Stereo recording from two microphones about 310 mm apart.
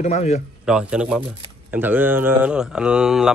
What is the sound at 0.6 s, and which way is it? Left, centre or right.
Speech, centre.